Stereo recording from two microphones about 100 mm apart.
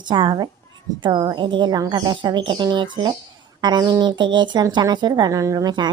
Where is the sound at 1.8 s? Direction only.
40° right (ahead or behind).